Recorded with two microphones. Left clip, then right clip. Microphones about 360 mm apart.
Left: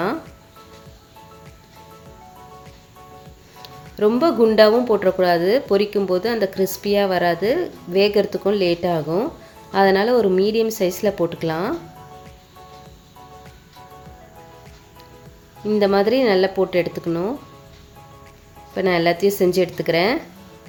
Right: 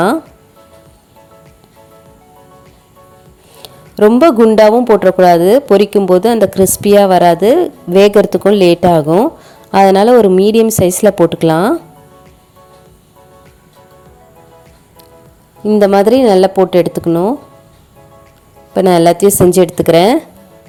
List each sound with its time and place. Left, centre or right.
3.6 s music: right
4.3 s a woman's voice: right
15.6 s a woman's voice: right
18.7 s a woman's voice: right